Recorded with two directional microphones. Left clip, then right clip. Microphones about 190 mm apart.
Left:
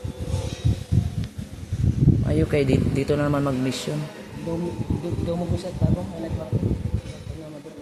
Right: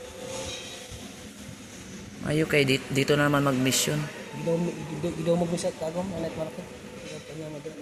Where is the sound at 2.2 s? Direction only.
10° left (ahead or behind).